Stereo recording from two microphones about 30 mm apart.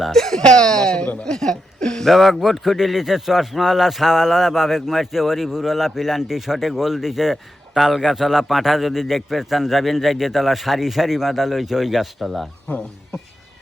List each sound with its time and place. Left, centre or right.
0.1 s speech: centre
0.4 s speech: left
0.9 s speech: left
1.4 s chuckle: left
2.0 s a man's voice: centre
2.6 s a man's voice: centre
12.7 s speech: left